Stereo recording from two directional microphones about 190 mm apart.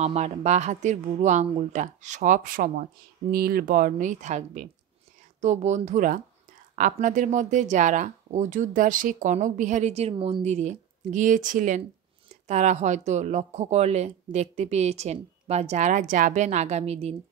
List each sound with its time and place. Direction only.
0.0 s speech: 35° right (ahead or behind)